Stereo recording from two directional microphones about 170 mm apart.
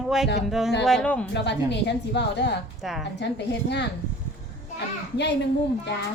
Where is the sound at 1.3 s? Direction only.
90° left.